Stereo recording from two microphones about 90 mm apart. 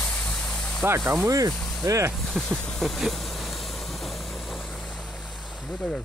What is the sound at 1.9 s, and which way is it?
Speech, 35° right (ahead or behind).